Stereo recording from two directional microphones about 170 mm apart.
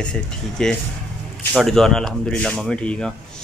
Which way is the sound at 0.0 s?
5° left (ahead or behind).